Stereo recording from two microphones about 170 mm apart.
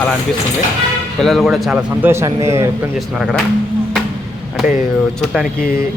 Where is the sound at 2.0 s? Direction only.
15° right (ahead or behind).